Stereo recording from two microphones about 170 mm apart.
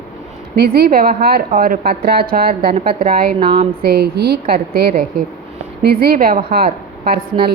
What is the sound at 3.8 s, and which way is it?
A woman's voice, 70° right (ahead or behind).